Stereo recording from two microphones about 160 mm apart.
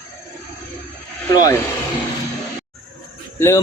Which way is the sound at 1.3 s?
25° left (ahead or behind).